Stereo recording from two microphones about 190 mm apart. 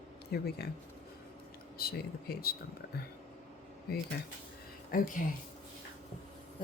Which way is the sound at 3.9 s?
55° left (ahead or behind).